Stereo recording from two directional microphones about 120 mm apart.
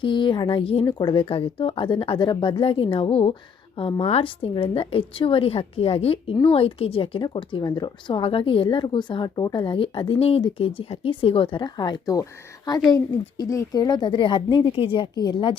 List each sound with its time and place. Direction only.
0.0 s a woman's voice: 40° left (ahead or behind)